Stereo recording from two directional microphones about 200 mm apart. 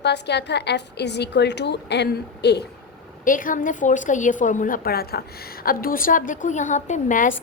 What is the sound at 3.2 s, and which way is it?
A woman's voice, 40° left (ahead or behind).